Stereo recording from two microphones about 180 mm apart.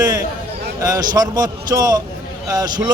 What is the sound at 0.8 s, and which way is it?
A man's voice, 20° right (ahead or behind).